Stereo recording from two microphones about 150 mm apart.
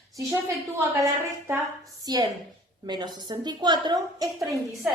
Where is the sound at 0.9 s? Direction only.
20° right (ahead or behind).